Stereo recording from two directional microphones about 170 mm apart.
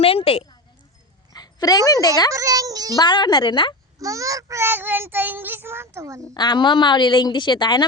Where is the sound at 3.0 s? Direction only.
25° left (ahead or behind).